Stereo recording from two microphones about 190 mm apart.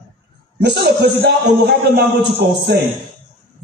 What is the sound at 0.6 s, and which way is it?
A man's voice, 60° right (ahead or behind).